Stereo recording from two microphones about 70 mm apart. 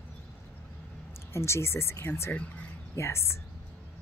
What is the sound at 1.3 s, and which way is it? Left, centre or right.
Speech, left.